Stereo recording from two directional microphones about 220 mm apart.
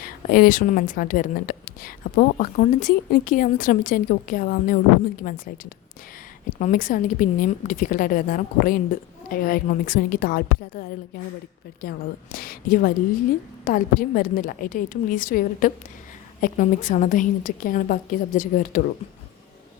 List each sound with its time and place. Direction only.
0.0 s speech: 40° left (ahead or behind)